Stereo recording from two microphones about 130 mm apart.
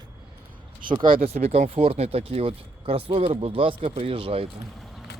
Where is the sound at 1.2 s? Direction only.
55° right (ahead or behind).